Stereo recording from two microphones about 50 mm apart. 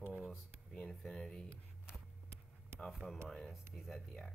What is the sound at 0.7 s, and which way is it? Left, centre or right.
Speech, centre.